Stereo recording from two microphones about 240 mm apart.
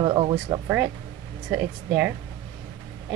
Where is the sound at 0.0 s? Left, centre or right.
Centre.